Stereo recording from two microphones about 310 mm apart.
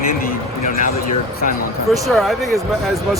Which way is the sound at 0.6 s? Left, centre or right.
Left.